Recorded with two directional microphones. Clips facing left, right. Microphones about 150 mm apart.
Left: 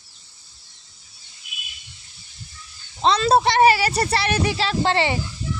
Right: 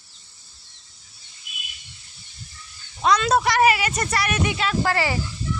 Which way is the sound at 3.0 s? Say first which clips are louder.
Left 2 dB; 30° left (ahead or behind).